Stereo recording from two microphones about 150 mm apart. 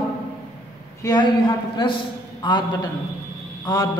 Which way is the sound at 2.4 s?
30° left (ahead or behind).